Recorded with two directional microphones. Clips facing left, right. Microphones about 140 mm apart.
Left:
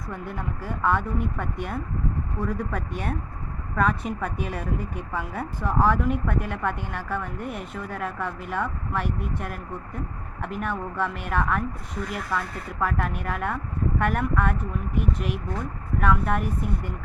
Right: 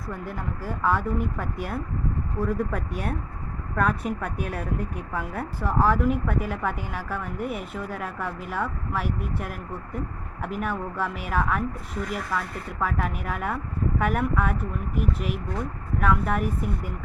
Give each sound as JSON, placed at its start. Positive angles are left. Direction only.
{"t": 0.3, "sound": "a woman's voice", "side_deg": -5}
{"t": 12.8, "sound": "a woman's voice", "side_deg": 0}